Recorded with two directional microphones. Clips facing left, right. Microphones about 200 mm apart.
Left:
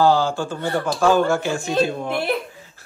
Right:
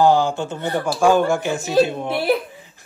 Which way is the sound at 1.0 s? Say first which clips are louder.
Right 1 dB; 15° right (ahead or behind).